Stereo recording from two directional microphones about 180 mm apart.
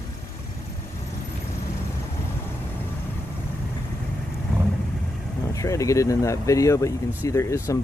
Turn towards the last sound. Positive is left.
turn(degrees=15)  # may be behind; listen again after turning